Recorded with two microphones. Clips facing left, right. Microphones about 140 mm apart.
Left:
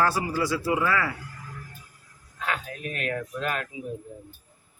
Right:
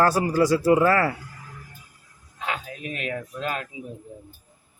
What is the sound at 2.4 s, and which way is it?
Speech, 20° right (ahead or behind).